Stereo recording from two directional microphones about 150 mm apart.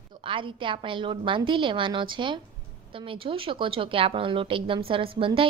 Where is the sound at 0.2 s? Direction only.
35° right (ahead or behind).